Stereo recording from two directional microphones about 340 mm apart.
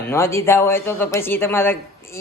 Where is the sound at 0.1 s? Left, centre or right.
Centre.